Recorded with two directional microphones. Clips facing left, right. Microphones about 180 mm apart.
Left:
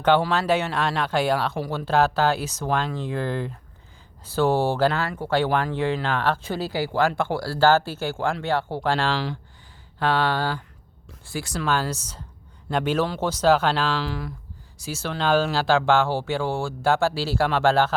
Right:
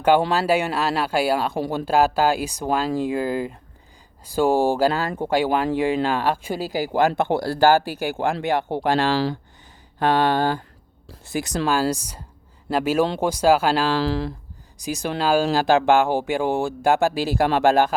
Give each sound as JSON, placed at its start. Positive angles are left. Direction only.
{"t": 0.3, "sound": "speech", "side_deg": -10}
{"t": 4.9, "sound": "speech", "side_deg": -35}
{"t": 5.2, "sound": "speech", "side_deg": -15}
{"t": 9.1, "sound": "speech", "side_deg": -35}
{"t": 10.0, "sound": "speech", "side_deg": -20}
{"t": 13.9, "sound": "speech", "side_deg": -35}
{"t": 14.8, "sound": "speech", "side_deg": -15}